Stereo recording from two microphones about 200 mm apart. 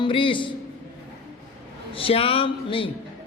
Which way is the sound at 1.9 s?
30° left (ahead or behind).